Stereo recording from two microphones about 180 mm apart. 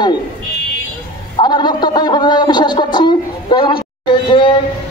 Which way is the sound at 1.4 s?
25° left (ahead or behind).